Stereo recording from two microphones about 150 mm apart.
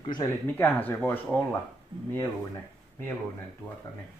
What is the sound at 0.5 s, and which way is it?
Speech, 15° left (ahead or behind).